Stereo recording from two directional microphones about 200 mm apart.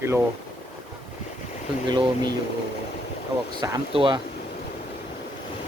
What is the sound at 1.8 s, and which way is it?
Speech, 20° right (ahead or behind).